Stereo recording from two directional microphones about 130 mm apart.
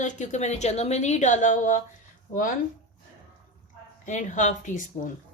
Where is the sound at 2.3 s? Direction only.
90° left.